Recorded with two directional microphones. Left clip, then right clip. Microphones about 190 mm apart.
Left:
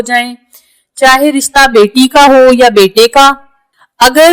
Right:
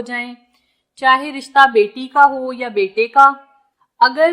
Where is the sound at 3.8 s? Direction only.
35° left (ahead or behind).